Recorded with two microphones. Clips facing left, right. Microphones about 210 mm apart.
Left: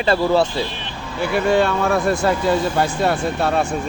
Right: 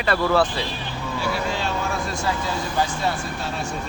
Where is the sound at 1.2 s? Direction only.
60° left (ahead or behind).